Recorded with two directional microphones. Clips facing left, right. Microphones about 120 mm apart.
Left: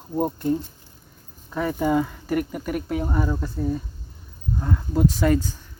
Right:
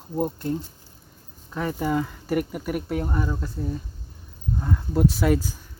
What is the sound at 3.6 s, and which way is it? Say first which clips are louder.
Speech: left 6 dB; 70° left (ahead or behind).